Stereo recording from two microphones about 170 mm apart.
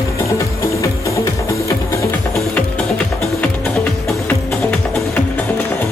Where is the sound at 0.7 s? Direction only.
20° left (ahead or behind).